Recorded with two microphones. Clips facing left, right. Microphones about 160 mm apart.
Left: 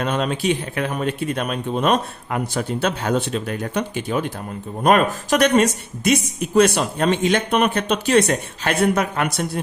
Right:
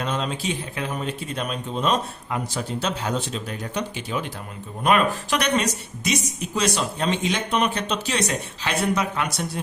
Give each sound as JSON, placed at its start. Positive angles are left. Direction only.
{"t": 0.0, "sound": "speech", "side_deg": 60}